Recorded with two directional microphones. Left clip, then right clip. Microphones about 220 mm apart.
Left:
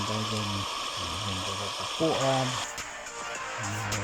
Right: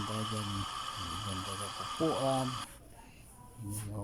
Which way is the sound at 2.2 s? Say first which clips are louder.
Left 6 dB; 20° left (ahead or behind).